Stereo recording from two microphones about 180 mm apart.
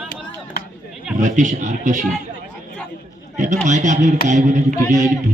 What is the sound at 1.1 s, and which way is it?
Speech, 45° right (ahead or behind).